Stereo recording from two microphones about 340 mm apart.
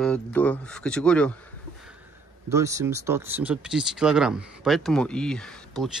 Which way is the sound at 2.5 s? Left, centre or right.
Centre.